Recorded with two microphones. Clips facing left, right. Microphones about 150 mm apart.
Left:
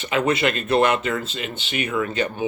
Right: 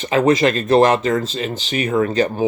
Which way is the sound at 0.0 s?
35° right (ahead or behind).